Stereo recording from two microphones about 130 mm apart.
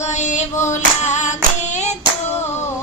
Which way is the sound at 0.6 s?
65° left (ahead or behind).